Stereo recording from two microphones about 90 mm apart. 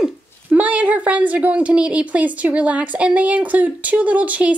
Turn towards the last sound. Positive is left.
turn(degrees=-15)  # may be behind; listen again after turning